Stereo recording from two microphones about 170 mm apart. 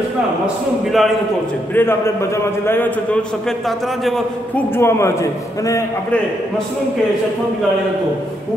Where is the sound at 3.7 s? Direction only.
Centre (ahead or behind).